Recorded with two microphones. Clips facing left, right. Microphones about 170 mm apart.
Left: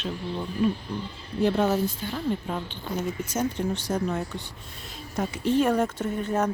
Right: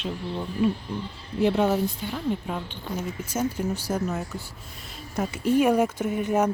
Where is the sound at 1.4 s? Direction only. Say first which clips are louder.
Right 1 dB; 15° right (ahead or behind).